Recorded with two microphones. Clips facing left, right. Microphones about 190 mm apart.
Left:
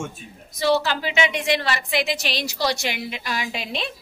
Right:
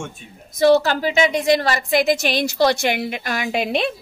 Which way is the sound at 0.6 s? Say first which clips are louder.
Right 6 dB; 45° right (ahead or behind).